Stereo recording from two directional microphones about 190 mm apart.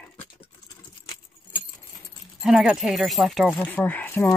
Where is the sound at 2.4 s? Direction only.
Centre (ahead or behind).